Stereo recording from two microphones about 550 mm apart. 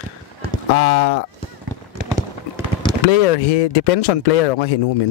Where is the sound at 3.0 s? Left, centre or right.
Left.